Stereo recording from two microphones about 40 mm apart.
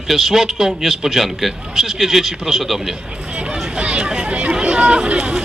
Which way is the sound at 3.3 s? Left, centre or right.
Right.